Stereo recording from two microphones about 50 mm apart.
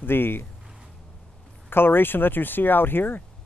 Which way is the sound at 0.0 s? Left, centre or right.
Left.